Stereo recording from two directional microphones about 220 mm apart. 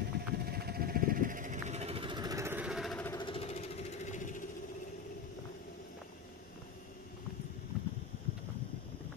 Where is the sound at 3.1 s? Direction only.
25° left (ahead or behind).